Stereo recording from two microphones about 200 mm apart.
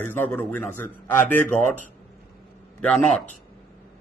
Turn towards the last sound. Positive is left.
turn(degrees=0)  # may be behind; listen again after turning